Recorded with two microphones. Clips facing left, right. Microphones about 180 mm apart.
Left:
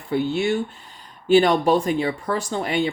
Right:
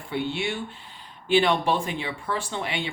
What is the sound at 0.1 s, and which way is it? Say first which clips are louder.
Speech: left 7 dB; 40° left (ahead or behind).